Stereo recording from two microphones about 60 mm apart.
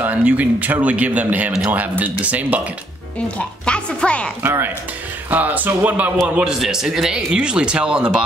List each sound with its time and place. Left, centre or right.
0.0 s speech: right
3.3 s a woman's voice: centre
4.4 s speech: right
6.2 s speech: centre
6.6 s speech: centre